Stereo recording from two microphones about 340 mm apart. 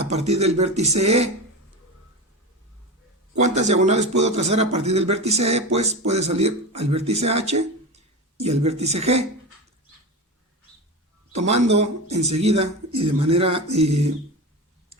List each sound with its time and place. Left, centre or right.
0.0 s speech: centre
0.9 s speech: right
3.3 s speech: centre
11.3 s speech: centre
13.3 s a sound: centre